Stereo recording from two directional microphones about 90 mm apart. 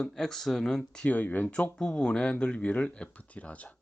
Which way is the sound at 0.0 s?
5° left (ahead or behind).